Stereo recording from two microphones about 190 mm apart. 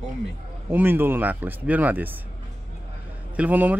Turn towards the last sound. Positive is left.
turn(degrees=-10)  # may be behind; listen again after turning